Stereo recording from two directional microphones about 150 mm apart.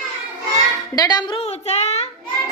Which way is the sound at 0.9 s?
25° left (ahead or behind).